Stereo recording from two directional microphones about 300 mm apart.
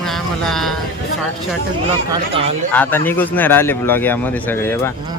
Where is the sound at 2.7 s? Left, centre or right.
Centre.